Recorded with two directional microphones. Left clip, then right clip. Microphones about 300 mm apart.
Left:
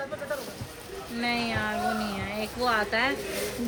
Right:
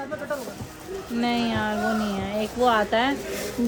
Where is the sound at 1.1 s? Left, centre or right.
Right.